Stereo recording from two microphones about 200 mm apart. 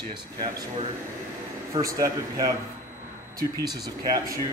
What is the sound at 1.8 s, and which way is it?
Speech, 15° right (ahead or behind).